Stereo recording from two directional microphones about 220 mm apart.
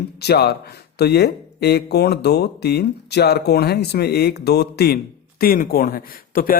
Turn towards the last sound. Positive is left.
turn(degrees=40)  # may be behind; listen again after turning